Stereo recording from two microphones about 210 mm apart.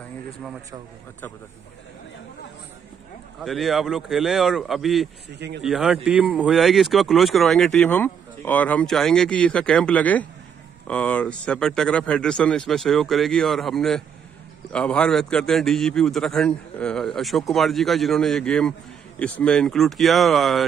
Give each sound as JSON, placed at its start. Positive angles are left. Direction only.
{"t": 3.3, "sound": "a man's voice", "side_deg": 0}
{"t": 5.3, "sound": "speech", "side_deg": -55}
{"t": 5.6, "sound": "a man's voice", "side_deg": 0}